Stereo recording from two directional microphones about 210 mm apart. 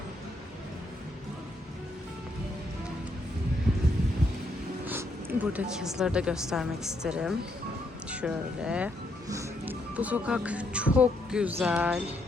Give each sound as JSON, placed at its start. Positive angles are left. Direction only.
{"t": 4.9, "sound": "a woman's voice", "side_deg": -10}